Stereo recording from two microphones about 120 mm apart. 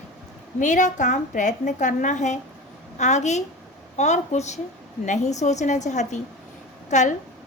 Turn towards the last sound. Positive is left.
turn(degrees=90)